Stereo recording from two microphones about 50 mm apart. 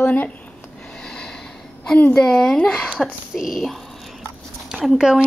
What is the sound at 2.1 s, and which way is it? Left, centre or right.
Speech, centre.